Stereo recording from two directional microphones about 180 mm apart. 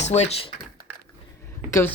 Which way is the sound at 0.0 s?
40° left (ahead or behind).